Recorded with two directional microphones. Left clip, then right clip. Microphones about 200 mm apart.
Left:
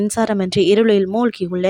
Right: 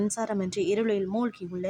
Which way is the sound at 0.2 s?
40° left (ahead or behind).